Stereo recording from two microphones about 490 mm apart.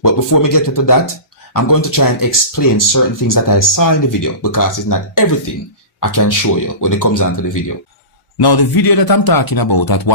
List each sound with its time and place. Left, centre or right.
0.0 s speech: left
8.4 s speech: left